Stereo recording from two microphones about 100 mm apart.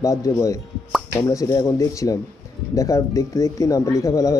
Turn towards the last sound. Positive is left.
turn(degrees=30)  # may be behind; listen again after turning